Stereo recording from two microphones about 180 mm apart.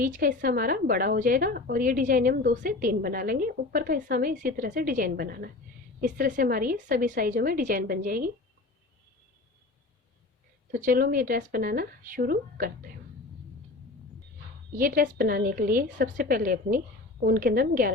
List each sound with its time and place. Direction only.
0.0 s a woman's voice: 50° right (ahead or behind)
10.7 s a woman's voice: 55° right (ahead or behind)
14.8 s a woman's voice: 50° right (ahead or behind)